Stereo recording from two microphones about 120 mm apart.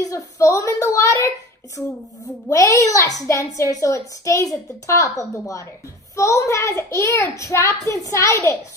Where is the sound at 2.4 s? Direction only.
25° left (ahead or behind).